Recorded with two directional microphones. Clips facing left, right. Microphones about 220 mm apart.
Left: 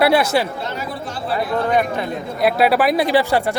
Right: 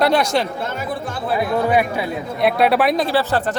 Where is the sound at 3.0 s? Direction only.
15° left (ahead or behind).